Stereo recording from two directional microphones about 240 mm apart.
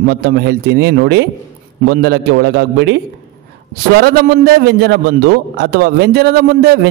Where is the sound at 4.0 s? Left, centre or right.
Right.